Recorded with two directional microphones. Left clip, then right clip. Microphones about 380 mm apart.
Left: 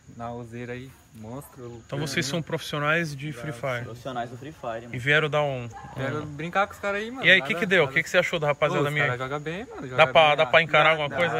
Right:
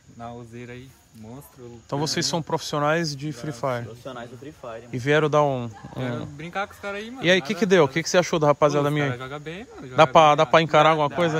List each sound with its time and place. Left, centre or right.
0.2 s speech: centre
1.9 s speech: centre
4.0 s speech: centre
4.9 s speech: centre
5.9 s speech: centre
7.2 s speech: centre
9.1 s speech: centre
9.9 s speech: centre